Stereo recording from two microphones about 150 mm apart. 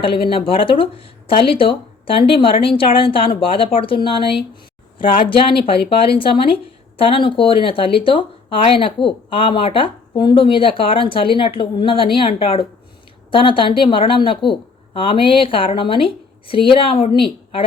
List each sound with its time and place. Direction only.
0.0 s speech: 35° left (ahead or behind)